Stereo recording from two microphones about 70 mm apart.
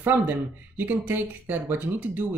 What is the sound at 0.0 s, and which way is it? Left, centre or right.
Speech, right.